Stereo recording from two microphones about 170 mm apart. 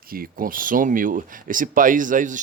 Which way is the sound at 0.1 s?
55° right (ahead or behind).